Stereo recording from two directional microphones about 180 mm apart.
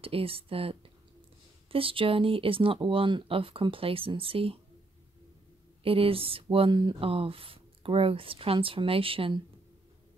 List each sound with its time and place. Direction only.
0.0 s speech: 30° right (ahead or behind)
5.9 s speech: 30° right (ahead or behind)